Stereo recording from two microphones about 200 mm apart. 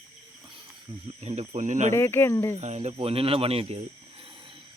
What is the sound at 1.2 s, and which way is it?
Speech, 35° right (ahead or behind).